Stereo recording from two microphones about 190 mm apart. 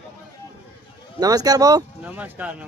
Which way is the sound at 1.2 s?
20° right (ahead or behind).